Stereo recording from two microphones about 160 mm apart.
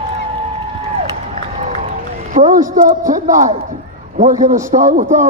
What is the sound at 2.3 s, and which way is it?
A woman's voice, 55° right (ahead or behind).